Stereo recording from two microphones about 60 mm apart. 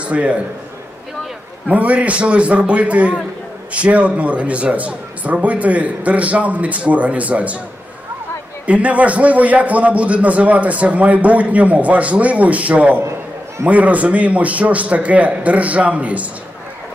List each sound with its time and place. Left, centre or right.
0.0 s a man's voice: right
1.7 s a man's voice: right
8.6 s a man's voice: right